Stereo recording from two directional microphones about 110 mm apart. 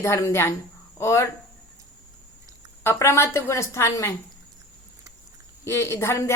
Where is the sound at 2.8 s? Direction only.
25° left (ahead or behind).